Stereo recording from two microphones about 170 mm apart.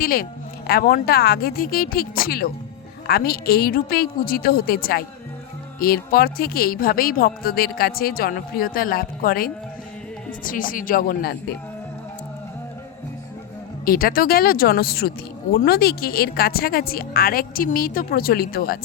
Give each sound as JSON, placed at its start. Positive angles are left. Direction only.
{"t": 0.0, "sound": "a woman's voice", "side_deg": 60}
{"t": 13.8, "sound": "a woman's voice", "side_deg": 60}